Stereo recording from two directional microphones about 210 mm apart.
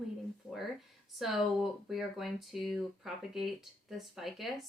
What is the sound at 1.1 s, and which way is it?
Speech, centre (ahead or behind).